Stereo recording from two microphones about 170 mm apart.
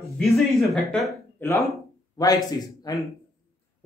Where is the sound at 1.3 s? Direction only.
10° left (ahead or behind).